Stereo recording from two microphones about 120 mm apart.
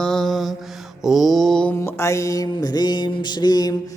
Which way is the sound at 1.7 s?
20° left (ahead or behind).